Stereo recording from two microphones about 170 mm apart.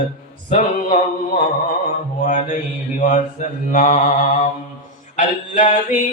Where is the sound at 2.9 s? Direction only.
45° left (ahead or behind).